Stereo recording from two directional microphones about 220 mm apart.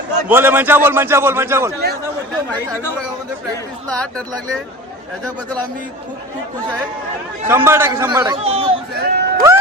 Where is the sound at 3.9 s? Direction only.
5° left (ahead or behind).